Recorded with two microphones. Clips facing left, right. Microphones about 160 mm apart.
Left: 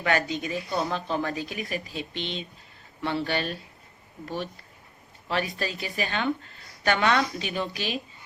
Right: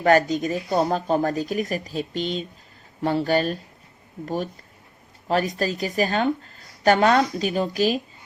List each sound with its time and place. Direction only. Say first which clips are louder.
0.0 s a woman's voice: right 8 dB; 40° right (ahead or behind)
5.3 s a woman's voice: right 6 dB; 40° right (ahead or behind)